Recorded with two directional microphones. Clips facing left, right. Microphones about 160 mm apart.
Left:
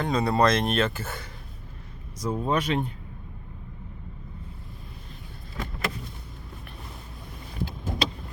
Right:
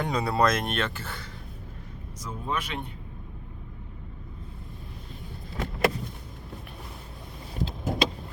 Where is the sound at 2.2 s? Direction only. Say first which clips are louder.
Left 7 dB; 35° left (ahead or behind).